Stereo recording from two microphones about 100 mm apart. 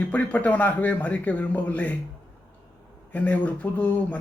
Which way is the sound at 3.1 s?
15° left (ahead or behind).